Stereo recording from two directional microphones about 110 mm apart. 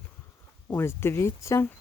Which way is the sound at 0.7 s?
25° left (ahead or behind).